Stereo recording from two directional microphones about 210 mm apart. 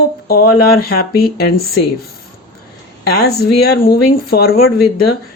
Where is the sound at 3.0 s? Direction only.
50° left (ahead or behind).